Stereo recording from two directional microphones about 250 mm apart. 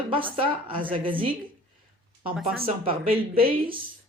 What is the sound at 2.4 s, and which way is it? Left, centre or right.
Speech, right.